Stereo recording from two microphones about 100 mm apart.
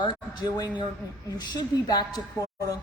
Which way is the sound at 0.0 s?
45° left (ahead or behind).